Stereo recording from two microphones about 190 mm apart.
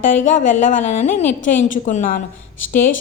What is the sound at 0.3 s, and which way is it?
A woman's voice, 40° left (ahead or behind).